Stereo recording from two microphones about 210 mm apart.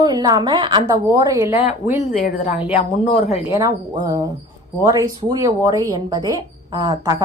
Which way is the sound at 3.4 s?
15° right (ahead or behind).